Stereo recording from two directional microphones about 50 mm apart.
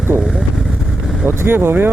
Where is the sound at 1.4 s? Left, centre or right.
Right.